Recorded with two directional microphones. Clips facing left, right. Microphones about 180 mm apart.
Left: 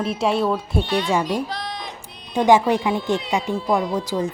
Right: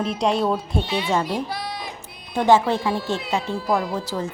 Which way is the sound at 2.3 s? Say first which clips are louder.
Left 2 dB; 15° left (ahead or behind).